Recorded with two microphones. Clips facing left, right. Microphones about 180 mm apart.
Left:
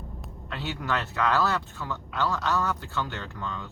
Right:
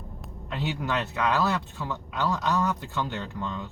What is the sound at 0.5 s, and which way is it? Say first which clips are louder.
Speech: right 2 dB; 15° right (ahead or behind).